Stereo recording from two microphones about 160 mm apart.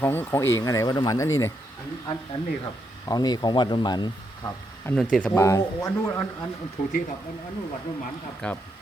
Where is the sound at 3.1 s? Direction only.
25° left (ahead or behind).